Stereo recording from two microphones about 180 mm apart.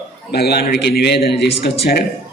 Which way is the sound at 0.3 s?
60° left (ahead or behind).